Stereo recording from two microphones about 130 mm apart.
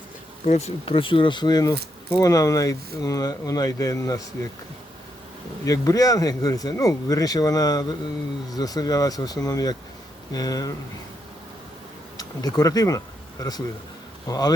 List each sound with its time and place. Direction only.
0.4 s speech: 55° left (ahead or behind); by 1.7 s 30° left (ahead or behind)
2.0 s speech: 20° left (ahead or behind)
5.6 s speech: 25° left (ahead or behind)
12.1 s speech: 30° left (ahead or behind)